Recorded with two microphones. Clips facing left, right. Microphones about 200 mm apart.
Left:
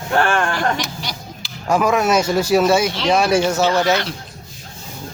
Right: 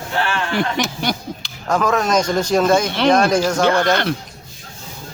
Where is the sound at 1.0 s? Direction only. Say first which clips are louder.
Right 9 dB; 55° right (ahead or behind).